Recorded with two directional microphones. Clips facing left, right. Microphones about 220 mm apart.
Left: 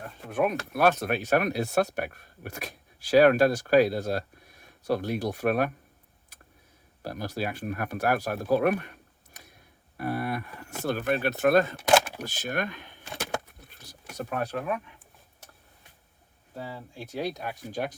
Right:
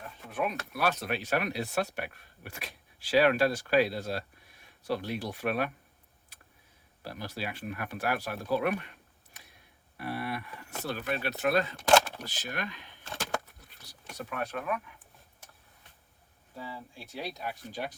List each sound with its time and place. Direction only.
0.0 s speech: 45° left (ahead or behind)
7.0 s speech: 45° left (ahead or behind)
14.2 s speech: 45° left (ahead or behind)
14.5 s speech: 30° left (ahead or behind)
16.6 s speech: 45° left (ahead or behind)